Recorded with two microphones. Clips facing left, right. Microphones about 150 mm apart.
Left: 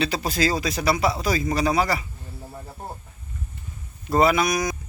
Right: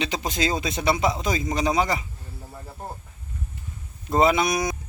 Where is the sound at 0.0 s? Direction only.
20° right (ahead or behind).